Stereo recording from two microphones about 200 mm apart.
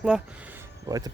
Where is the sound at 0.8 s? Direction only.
15° right (ahead or behind).